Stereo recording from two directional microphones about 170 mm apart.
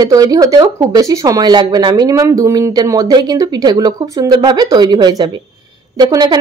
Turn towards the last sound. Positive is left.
turn(degrees=-25)  # may be behind; listen again after turning